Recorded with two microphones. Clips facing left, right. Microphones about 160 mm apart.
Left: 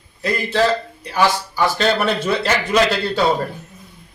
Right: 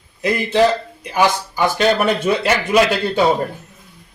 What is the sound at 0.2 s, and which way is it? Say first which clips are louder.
A man's voice: right 3 dB; 15° right (ahead or behind).